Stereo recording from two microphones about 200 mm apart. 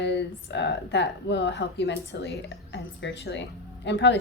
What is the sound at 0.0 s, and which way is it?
Speech, 60° left (ahead or behind).